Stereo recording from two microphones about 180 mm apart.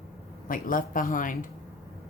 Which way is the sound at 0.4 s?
50° left (ahead or behind).